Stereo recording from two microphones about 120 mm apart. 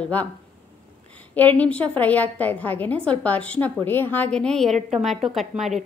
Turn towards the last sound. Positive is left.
turn(degrees=0)  # may be behind; listen again after turning